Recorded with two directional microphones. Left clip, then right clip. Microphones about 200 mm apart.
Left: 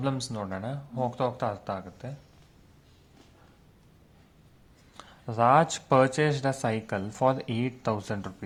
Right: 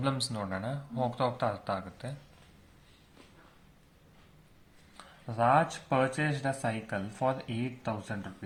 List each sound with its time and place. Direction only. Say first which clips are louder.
0.3 s speech: left 1 dB; 25° left (ahead or behind)
4.9 s speech: left 4 dB; 40° left (ahead or behind)